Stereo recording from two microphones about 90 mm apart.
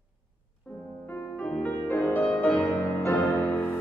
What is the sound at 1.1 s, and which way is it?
Music, 15° left (ahead or behind).